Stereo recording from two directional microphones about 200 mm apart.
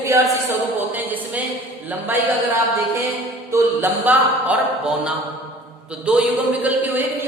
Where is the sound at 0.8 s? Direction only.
10° right (ahead or behind).